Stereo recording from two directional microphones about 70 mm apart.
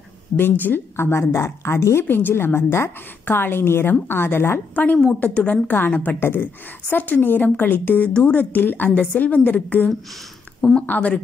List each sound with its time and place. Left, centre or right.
0.4 s a woman's voice: left
4.7 s a woman's voice: left